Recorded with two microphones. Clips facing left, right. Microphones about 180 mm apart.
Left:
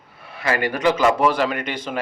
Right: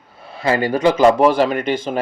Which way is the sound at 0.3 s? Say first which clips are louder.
Right 5 dB; 25° right (ahead or behind).